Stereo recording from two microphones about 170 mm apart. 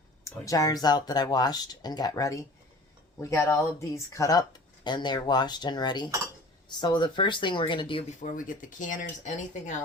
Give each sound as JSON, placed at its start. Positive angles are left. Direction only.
{"t": 0.3, "sound": "speech", "side_deg": 20}
{"t": 8.2, "sound": "speech", "side_deg": 50}